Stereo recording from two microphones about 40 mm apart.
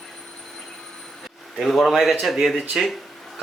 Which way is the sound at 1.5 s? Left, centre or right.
Centre.